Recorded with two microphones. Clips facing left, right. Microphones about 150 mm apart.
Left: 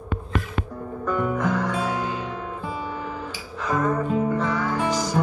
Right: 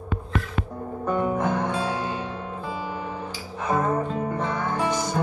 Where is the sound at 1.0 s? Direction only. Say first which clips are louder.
Even; 30° right (ahead or behind).